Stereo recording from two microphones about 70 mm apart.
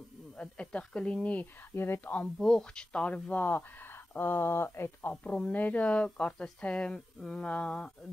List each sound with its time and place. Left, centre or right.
0.4 s speech: centre
1.7 s speech: left
2.3 s speech: centre; by 5.1 s left
5.1 s speech: centre